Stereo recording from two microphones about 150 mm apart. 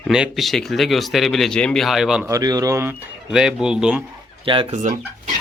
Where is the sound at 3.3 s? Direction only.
5° right (ahead or behind).